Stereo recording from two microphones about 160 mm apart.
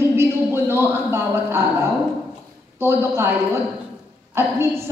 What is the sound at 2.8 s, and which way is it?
Speech, 15° right (ahead or behind).